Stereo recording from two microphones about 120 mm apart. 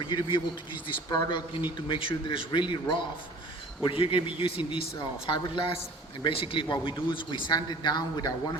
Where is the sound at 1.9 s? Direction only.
45° left (ahead or behind).